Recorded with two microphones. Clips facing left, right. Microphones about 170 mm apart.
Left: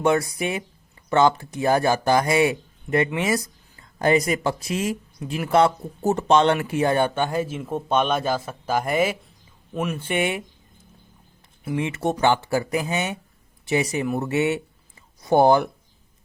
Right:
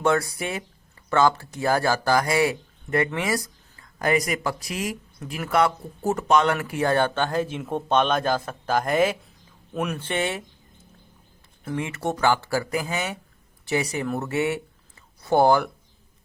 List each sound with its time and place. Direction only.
0.0 s speech: 15° left (ahead or behind)
11.6 s speech: 15° left (ahead or behind)